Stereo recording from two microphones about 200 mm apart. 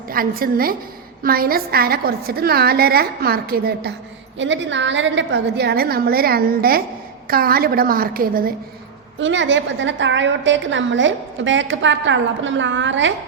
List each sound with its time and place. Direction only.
0.1 s a woman's voice: 45° right (ahead or behind)
4.4 s a woman's voice: 65° right (ahead or behind); by 8.5 s 45° right (ahead or behind)
9.1 s a woman's voice: 70° right (ahead or behind)